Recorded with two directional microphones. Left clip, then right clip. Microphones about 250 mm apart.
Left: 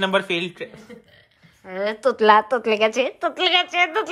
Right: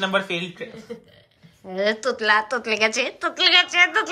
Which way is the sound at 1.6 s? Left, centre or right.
Centre.